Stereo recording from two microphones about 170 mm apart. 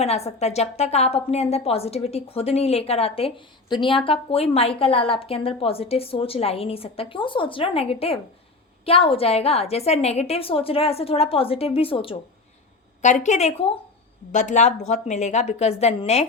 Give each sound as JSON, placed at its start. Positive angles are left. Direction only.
{"t": 0.0, "sound": "a woman's voice", "side_deg": 40}
{"t": 13.0, "sound": "a woman's voice", "side_deg": 45}